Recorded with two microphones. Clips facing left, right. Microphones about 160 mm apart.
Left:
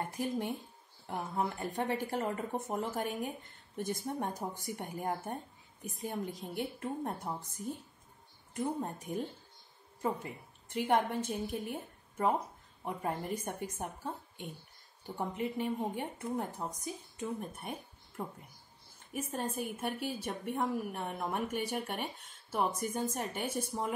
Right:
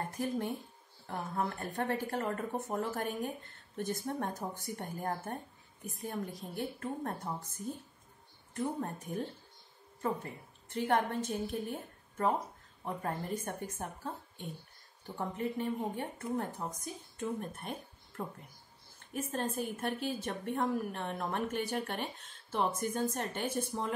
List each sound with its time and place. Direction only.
0.2 s a woman's voice: 15° left (ahead or behind)
8.5 s a woman's voice: 15° left (ahead or behind)